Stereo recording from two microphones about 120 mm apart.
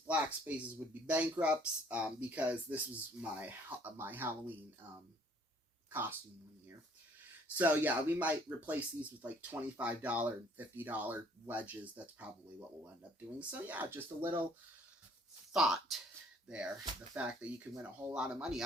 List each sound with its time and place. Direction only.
0.0 s speech: 15° right (ahead or behind)
5.9 s speech: 15° right (ahead or behind)
7.5 s speech: 15° right (ahead or behind)
15.5 s speech: centre (ahead or behind)
17.2 s speech: 10° right (ahead or behind)